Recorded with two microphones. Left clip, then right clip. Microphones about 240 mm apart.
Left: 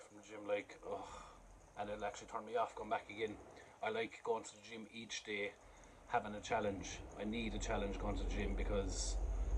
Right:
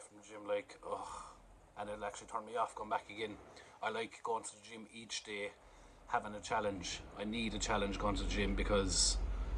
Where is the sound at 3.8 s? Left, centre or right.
Centre.